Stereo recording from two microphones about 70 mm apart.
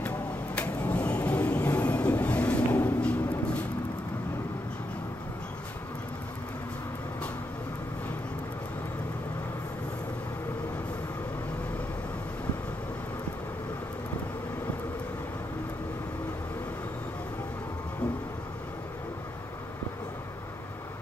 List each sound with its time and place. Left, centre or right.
0.6 s train: left